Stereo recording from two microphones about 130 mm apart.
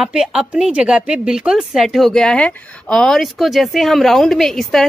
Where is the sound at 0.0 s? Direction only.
5° right (ahead or behind).